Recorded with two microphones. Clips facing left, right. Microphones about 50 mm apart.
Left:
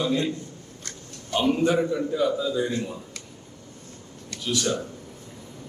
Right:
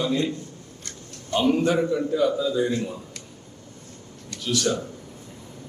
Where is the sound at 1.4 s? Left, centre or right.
Centre.